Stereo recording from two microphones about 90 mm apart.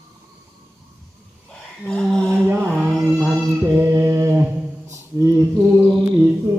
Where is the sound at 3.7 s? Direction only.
25° right (ahead or behind).